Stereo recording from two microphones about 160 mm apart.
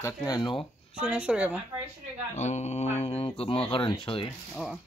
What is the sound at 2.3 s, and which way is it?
Speech, 45° left (ahead or behind).